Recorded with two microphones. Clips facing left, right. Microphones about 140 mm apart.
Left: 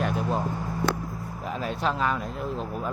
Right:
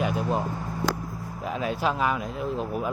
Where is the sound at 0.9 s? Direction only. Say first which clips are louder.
Even; 90° right.